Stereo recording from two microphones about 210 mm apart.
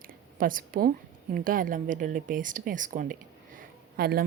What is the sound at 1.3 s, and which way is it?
Speech, 40° right (ahead or behind).